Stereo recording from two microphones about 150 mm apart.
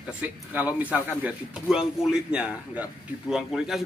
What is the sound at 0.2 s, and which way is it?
Speech, 10° right (ahead or behind).